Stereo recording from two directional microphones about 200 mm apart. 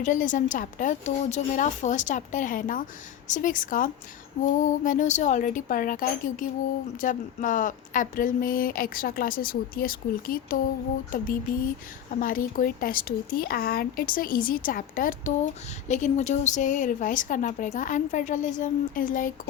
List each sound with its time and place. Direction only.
0.0 s speech: 40° left (ahead or behind)